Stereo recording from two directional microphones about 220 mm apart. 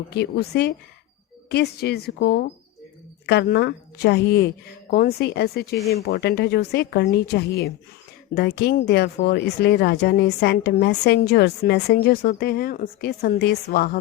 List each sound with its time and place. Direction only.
0.1 s a woman's voice: 50° left (ahead or behind)